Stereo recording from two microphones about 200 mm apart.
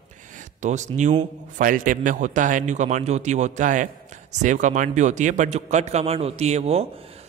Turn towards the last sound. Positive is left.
turn(degrees=-30)  # may be behind; listen again after turning